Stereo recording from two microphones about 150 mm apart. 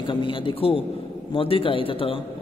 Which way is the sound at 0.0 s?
35° left (ahead or behind).